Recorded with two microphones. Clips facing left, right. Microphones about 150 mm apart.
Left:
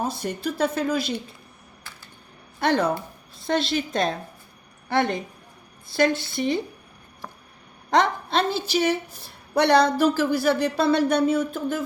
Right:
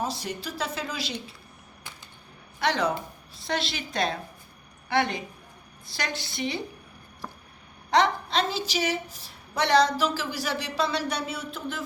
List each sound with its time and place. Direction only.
0.0 s a woman's voice: 50° left (ahead or behind)
2.6 s a woman's voice: 50° left (ahead or behind)
7.9 s a woman's voice: 50° left (ahead or behind)